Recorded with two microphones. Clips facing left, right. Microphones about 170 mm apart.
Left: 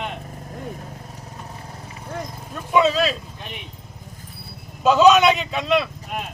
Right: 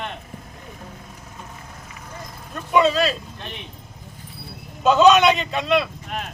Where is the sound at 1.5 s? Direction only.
30° left (ahead or behind).